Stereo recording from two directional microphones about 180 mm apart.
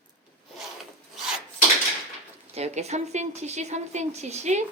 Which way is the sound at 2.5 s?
35° right (ahead or behind).